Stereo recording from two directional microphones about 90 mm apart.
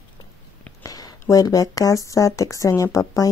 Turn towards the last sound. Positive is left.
turn(degrees=40)  # may be behind; listen again after turning